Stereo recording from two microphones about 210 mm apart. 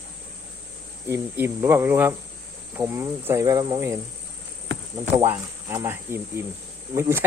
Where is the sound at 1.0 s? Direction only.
10° right (ahead or behind).